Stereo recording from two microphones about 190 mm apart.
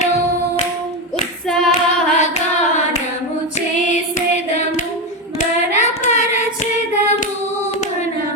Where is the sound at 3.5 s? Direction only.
40° left (ahead or behind).